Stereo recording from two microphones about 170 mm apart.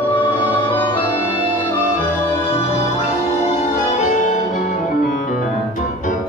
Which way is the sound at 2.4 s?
35° left (ahead or behind).